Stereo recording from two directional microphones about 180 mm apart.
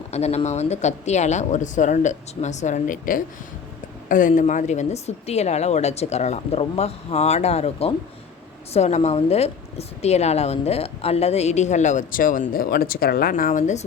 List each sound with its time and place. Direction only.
0.1 s a woman's voice: 35° left (ahead or behind)